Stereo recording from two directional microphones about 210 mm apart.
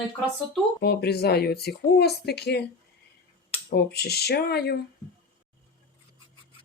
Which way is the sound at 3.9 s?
50° left (ahead or behind).